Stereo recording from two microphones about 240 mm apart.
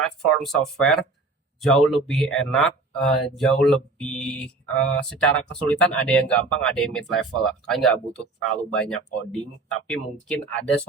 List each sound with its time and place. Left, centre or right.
0.0 s speech: centre